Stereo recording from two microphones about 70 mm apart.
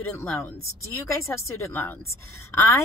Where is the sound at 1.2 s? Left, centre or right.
Left.